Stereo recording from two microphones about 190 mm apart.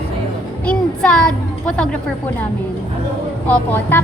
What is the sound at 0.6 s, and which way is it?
Music, 5° left (ahead or behind).